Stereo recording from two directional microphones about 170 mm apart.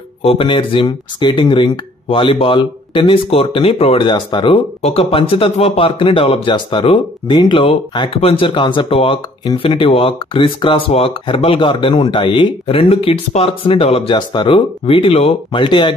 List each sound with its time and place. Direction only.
0.2 s speech: 35° left (ahead or behind)